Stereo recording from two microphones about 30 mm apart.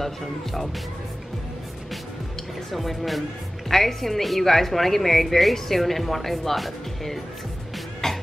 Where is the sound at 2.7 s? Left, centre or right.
Centre.